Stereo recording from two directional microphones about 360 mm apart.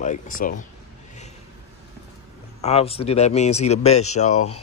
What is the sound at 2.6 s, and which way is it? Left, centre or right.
Speech, centre.